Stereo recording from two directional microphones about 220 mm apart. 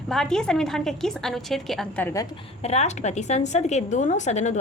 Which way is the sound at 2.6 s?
30° left (ahead or behind).